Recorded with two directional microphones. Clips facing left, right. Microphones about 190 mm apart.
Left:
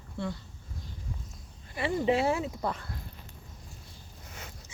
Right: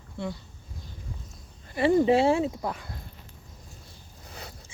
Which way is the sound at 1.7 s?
35° right (ahead or behind).